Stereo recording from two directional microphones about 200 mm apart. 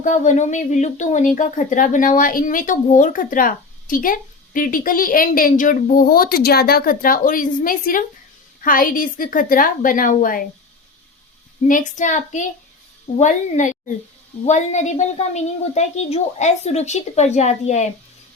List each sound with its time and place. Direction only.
0.0 s speech: 40° left (ahead or behind)
11.7 s a woman's voice: 40° left (ahead or behind)